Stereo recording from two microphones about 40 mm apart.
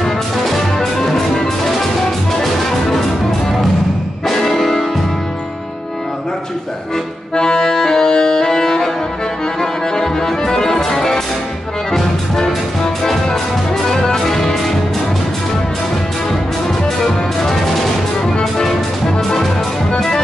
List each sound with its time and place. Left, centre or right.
0.0 s music: centre
4.3 s music: centre
7.3 s accordion: centre
9.6 s music: centre
13.8 s music: centre
18.2 s music: centre